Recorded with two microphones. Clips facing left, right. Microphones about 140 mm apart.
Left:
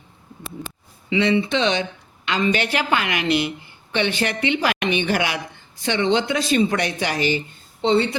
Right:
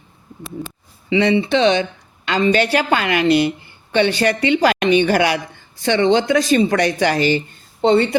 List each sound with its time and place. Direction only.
1.2 s a woman's voice: 35° right (ahead or behind); by 8.1 s 55° right (ahead or behind)